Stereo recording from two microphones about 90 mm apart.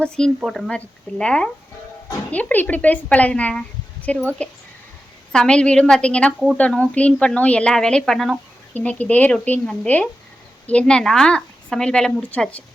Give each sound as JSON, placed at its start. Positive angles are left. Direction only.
{"t": 0.2, "sound": "speech", "side_deg": 5}
{"t": 8.7, "sound": "speech", "side_deg": 15}